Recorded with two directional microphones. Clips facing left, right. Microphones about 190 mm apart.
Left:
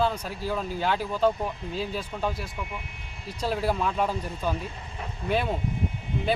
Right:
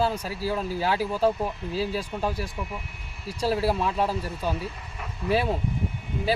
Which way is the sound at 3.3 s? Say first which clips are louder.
Right 2 dB; 5° right (ahead or behind).